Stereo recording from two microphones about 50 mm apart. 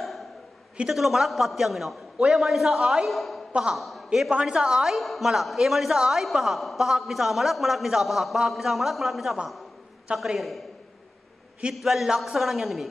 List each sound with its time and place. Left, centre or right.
0.8 s a man's voice: centre
4.3 s a woman's voice: centre
4.9 s a man's voice: centre
11.7 s a man's voice: centre